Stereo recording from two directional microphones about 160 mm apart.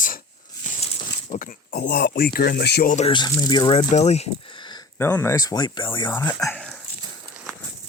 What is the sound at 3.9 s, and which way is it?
Speech, 45° left (ahead or behind).